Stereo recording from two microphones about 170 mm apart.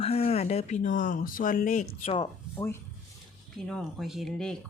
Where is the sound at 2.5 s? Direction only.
15° left (ahead or behind).